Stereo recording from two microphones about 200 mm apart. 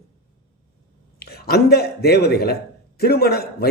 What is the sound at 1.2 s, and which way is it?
A man's voice, 50° left (ahead or behind).